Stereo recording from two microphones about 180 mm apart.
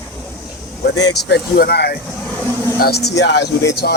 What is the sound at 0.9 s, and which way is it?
Speech, 70° left (ahead or behind).